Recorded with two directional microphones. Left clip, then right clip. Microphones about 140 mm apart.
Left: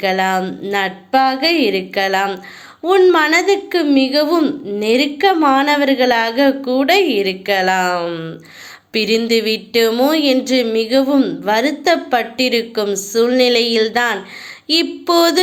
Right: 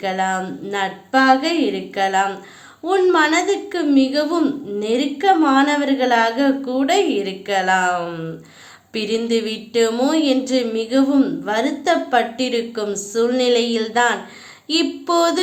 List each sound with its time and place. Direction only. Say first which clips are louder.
0.0 s a woman's voice: left 5 dB; 20° left (ahead or behind)